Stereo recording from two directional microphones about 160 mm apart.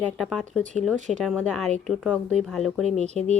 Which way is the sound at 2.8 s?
45° right (ahead or behind).